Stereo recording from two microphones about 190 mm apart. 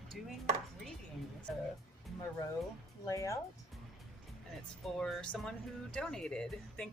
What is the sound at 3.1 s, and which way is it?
Speech, 15° left (ahead or behind).